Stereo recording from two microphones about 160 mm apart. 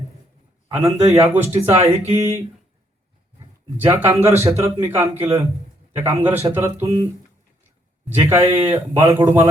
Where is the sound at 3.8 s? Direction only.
20° right (ahead or behind).